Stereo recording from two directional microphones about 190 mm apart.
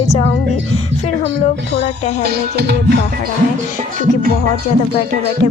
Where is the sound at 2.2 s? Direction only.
60° right (ahead or behind).